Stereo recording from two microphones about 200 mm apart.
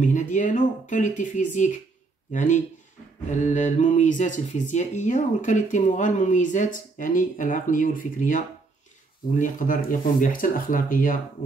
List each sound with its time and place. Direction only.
0.0 s speech: 40° left (ahead or behind)